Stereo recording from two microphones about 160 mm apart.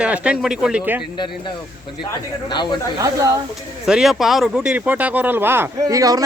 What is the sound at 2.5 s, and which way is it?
Speech, 25° left (ahead or behind).